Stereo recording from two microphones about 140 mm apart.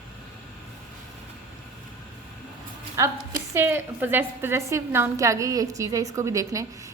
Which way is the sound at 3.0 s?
20° right (ahead or behind).